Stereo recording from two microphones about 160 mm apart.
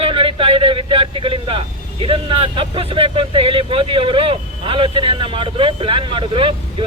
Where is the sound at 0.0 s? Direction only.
35° right (ahead or behind).